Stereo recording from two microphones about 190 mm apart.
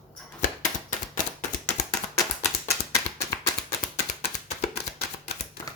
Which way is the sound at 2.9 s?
15° left (ahead or behind).